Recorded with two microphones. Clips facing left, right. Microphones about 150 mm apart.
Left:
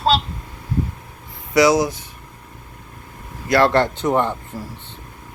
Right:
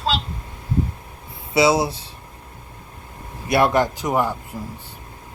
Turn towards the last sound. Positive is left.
turn(degrees=-20)  # may be behind; listen again after turning